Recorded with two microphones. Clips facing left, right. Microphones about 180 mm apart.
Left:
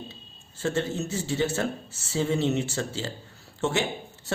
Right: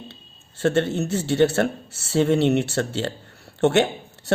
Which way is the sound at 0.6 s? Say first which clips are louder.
Right 7 dB; 70° right (ahead or behind).